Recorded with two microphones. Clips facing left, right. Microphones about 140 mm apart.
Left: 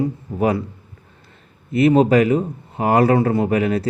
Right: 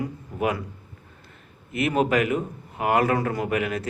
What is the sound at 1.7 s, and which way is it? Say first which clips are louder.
A man's voice: left 8 dB; 35° left (ahead or behind).